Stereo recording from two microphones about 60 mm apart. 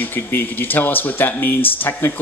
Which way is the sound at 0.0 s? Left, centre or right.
Left.